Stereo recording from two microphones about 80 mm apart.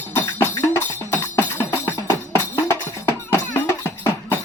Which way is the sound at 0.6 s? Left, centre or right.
Left.